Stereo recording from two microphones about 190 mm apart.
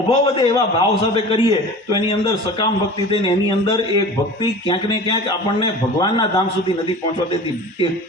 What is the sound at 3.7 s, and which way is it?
A man's voice, 25° left (ahead or behind).